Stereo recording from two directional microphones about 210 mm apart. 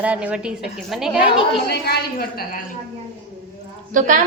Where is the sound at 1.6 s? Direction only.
50° left (ahead or behind).